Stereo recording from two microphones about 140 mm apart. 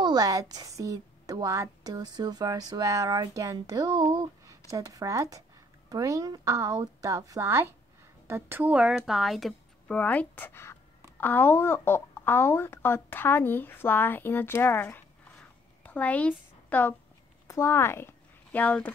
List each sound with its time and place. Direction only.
0.0 s a woman's voice: 30° right (ahead or behind); by 9.9 s centre (ahead or behind)
9.9 s speech: 10° left (ahead or behind)
15.8 s a sound: 10° left (ahead or behind)
17.5 s speech: 20° left (ahead or behind)